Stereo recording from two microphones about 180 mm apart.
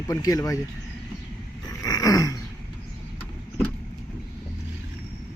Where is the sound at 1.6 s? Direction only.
20° left (ahead or behind).